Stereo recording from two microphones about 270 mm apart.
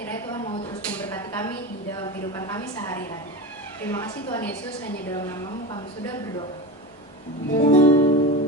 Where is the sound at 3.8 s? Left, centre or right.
Centre.